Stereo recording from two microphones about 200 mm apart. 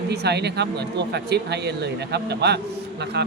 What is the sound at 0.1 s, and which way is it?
Speech, 55° right (ahead or behind).